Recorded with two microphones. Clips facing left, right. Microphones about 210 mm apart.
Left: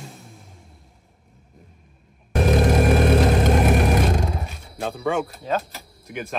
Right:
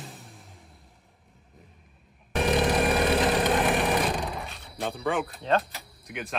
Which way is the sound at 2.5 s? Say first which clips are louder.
Left 5 dB; 45° left (ahead or behind).